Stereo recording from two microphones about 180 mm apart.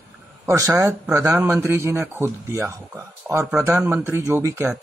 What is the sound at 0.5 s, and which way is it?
Speech, 15° right (ahead or behind).